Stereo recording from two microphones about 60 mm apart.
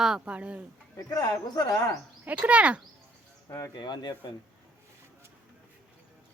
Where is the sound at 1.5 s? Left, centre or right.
Left.